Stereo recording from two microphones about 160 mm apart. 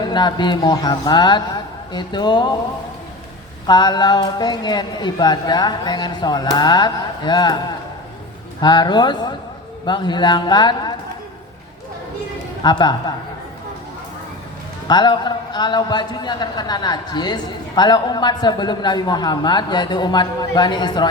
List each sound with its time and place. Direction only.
0.1 s a man's voice: 30° left (ahead or behind)
3.7 s a man's voice: 25° left (ahead or behind)
8.6 s a man's voice: 25° left (ahead or behind)
12.6 s a man's voice: 25° left (ahead or behind)
14.8 s a man's voice: 25° left (ahead or behind)